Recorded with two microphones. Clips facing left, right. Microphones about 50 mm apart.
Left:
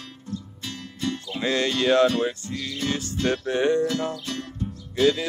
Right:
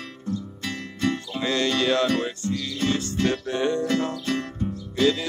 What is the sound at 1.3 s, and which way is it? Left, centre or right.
Speech, centre.